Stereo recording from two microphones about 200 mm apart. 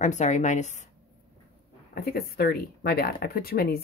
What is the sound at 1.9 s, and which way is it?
Speech, 50° left (ahead or behind).